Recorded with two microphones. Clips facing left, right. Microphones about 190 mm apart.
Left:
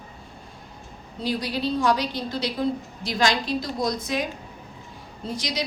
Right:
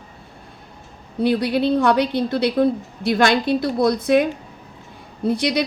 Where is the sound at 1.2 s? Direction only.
60° right (ahead or behind).